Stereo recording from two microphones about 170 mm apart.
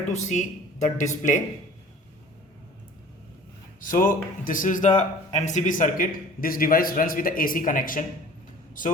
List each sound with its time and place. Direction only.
0.1 s speech: 45° left (ahead or behind)
3.8 s a man's voice: 55° left (ahead or behind)